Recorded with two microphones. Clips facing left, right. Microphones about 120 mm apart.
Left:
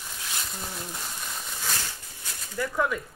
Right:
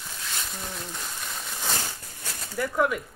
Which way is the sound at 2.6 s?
10° right (ahead or behind).